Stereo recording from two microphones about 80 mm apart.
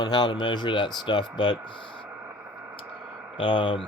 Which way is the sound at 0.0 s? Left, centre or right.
Left.